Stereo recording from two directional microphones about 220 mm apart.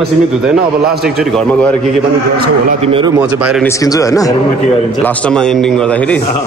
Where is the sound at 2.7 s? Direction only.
25° right (ahead or behind).